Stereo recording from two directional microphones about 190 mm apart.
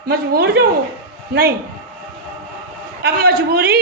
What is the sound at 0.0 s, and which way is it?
A woman's voice, 55° right (ahead or behind).